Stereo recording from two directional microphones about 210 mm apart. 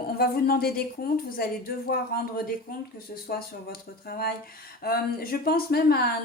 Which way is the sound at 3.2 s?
45° left (ahead or behind).